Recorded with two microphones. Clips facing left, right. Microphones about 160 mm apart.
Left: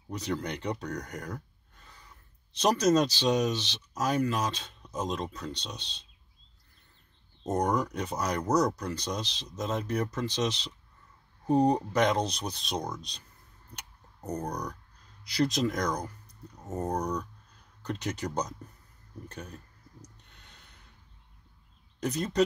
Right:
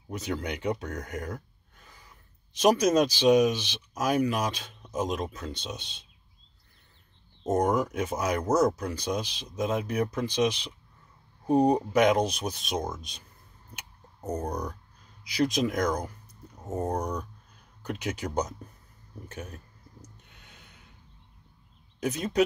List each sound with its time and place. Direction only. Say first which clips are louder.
0.2 s speech: right 1 dB; 5° right (ahead or behind)
1.9 s a sound: even; 10° right (ahead or behind)
2.6 s speech: right 2 dB; 10° right (ahead or behind)
7.4 s speech: right 3 dB; 5° right (ahead or behind)
13.7 s a sound: right 1 dB; 5° right (ahead or behind)
14.4 s speech: right 2 dB; 25° right (ahead or behind)
15.2 s speech: right 1 dB; 10° right (ahead or behind)
19.3 s a sound: right 5 dB; 5° right (ahead or behind)
22.0 s speech: right 1 dB; 10° right (ahead or behind)